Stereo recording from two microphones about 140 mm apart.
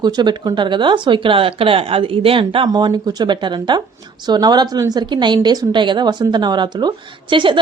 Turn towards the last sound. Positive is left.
turn(degrees=-35)  # may be behind; listen again after turning